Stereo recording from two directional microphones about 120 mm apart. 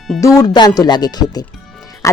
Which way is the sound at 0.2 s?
30° left (ahead or behind).